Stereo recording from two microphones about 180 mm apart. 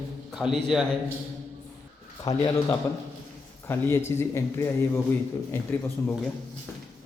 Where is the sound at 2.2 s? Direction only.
20° left (ahead or behind).